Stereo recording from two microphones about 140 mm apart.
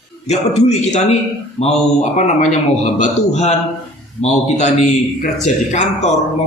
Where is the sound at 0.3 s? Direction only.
50° left (ahead or behind).